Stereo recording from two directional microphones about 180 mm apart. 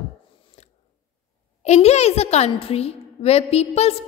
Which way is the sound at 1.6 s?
35° left (ahead or behind).